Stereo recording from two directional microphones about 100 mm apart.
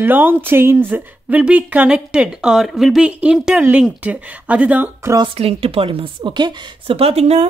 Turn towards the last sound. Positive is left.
turn(degrees=-90)